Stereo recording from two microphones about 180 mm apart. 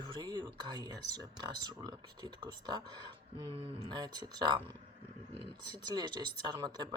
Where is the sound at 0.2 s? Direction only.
25° right (ahead or behind).